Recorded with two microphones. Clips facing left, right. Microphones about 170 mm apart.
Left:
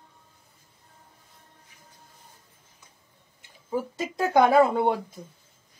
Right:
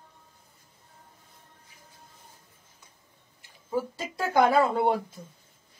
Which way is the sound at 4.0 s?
20° left (ahead or behind).